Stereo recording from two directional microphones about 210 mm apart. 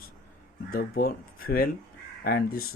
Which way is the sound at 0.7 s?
45° left (ahead or behind).